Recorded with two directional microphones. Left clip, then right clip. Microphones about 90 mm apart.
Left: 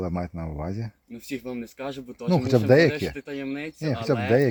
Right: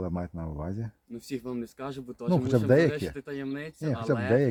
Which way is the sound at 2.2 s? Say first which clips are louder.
Left 5 dB; 45° left (ahead or behind).